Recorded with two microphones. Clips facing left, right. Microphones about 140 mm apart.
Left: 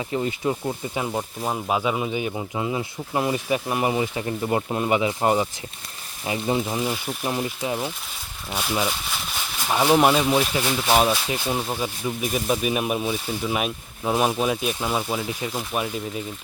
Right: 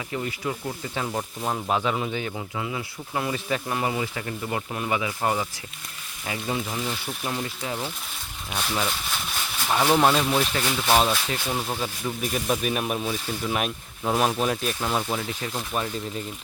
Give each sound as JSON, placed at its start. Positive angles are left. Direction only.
{"t": 0.1, "sound": "speech", "side_deg": 25}
{"t": 1.1, "sound": "speech", "side_deg": 10}